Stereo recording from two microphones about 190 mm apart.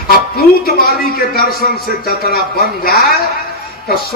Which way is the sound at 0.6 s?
50° left (ahead or behind).